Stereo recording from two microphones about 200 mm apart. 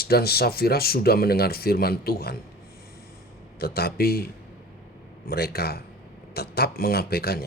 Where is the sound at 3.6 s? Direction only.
50° left (ahead or behind).